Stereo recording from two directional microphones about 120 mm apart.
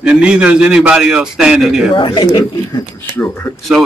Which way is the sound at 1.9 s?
40° left (ahead or behind).